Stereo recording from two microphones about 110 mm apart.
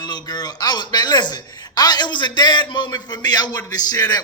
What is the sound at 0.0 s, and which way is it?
A man's voice, 40° left (ahead or behind).